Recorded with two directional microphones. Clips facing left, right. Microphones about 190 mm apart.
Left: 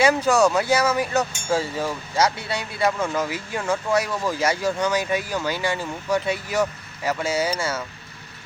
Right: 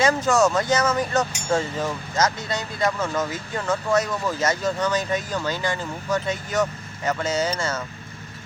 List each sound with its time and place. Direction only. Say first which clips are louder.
0.0 s speech: left 1 dB; 10° left (ahead or behind)